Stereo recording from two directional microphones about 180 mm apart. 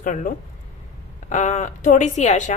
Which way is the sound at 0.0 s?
45° left (ahead or behind).